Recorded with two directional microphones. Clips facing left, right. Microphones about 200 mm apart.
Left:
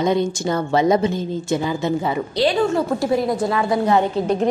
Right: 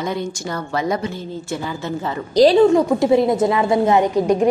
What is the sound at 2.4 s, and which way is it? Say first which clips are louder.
Speech: right 8 dB; 40° right (ahead or behind).